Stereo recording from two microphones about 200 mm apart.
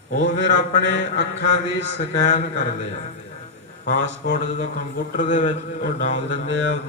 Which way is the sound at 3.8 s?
65° right (ahead or behind).